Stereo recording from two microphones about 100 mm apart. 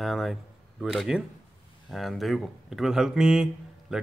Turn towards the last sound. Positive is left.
turn(degrees=-5)  # may be behind; listen again after turning